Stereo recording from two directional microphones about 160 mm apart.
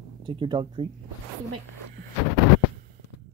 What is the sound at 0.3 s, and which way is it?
Speech, 30° right (ahead or behind).